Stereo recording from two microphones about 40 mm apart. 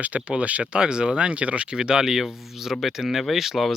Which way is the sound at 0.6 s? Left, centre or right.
Right.